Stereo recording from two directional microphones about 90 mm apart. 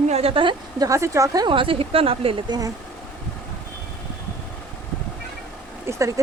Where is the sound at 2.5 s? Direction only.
40° right (ahead or behind).